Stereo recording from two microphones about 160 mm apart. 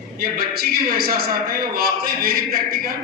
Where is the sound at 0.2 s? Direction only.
70° right (ahead or behind).